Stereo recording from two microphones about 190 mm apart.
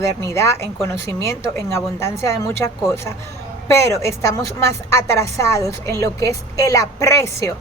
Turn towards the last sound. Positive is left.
turn(degrees=15)  # may be behind; listen again after turning